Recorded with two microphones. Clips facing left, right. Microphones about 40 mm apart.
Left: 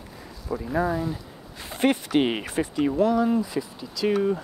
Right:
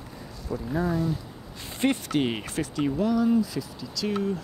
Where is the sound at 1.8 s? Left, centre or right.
Centre.